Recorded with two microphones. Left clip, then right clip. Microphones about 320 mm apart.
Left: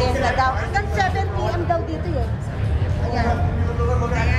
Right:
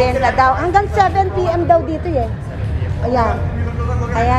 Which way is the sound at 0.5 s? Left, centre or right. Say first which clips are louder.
Right 9 dB; left.